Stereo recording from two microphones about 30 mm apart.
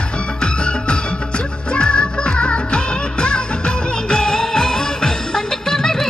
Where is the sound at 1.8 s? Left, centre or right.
Left.